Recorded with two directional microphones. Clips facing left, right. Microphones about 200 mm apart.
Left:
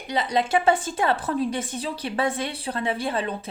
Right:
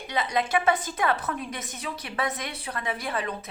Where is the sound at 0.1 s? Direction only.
30° left (ahead or behind).